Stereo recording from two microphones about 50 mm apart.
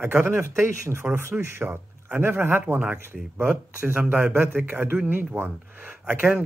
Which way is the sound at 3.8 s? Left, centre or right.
Right.